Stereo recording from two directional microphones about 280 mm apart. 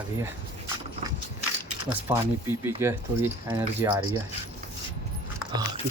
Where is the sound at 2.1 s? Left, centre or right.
Centre.